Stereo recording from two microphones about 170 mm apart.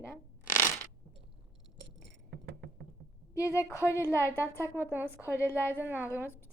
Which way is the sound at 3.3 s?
15° left (ahead or behind).